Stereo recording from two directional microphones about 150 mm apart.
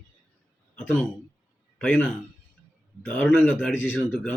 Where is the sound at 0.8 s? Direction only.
5° left (ahead or behind).